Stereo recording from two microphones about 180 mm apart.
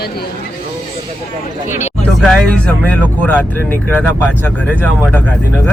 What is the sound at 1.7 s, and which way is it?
Speech, 40° left (ahead or behind).